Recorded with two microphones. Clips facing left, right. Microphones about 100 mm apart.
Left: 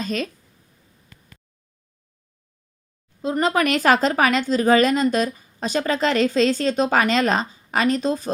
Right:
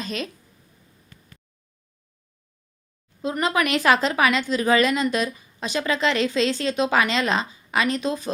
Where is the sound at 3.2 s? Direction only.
40° left (ahead or behind).